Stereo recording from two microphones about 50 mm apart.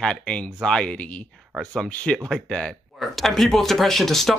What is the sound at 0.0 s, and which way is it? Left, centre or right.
Speech, centre.